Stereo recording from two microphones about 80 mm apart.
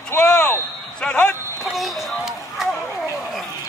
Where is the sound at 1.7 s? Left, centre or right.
Centre.